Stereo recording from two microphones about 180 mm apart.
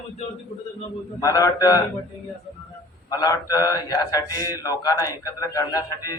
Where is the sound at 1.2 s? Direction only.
20° left (ahead or behind).